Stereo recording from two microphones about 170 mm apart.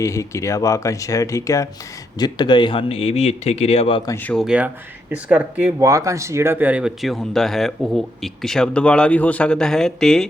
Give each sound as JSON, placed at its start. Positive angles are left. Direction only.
{"t": 0.0, "sound": "speech", "side_deg": 15}
{"t": 4.0, "sound": "speech", "side_deg": 15}
{"t": 4.4, "sound": "speech", "side_deg": -5}